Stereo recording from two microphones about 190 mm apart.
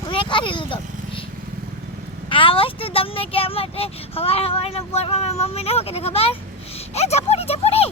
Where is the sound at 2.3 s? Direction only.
25° left (ahead or behind).